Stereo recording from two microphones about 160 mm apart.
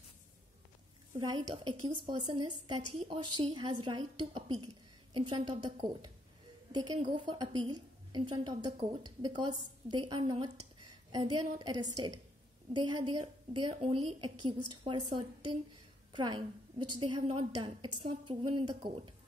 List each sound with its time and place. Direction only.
1.1 s a woman's voice: 25° right (ahead or behind)